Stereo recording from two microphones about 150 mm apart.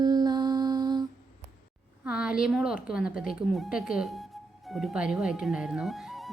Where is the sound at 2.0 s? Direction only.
5° right (ahead or behind).